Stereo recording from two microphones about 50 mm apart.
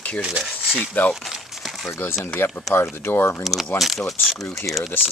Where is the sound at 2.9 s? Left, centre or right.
Left.